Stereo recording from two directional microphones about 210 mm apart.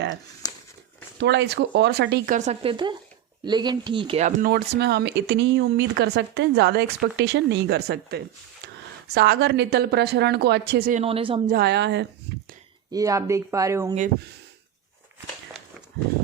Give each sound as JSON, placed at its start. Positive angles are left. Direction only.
{"t": 1.2, "sound": "speech", "side_deg": -55}
{"t": 11.0, "sound": "speech", "side_deg": -25}
{"t": 11.4, "sound": "speech", "side_deg": -50}
{"t": 12.9, "sound": "speech", "side_deg": -15}